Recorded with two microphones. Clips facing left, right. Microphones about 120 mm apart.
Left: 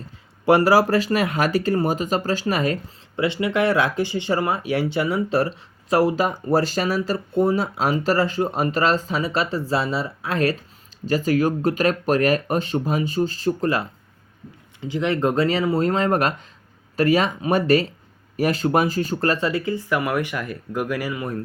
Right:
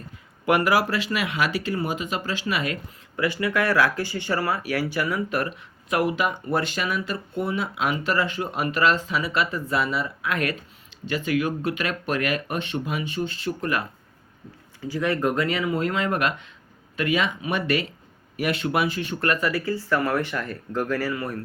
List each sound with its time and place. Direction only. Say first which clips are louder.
0.4 s speech: left 5 dB; 35° left (ahead or behind)
3.2 s speech: left 3 dB; 25° left (ahead or behind)
14.8 s speech: left 3 dB; 20° left (ahead or behind)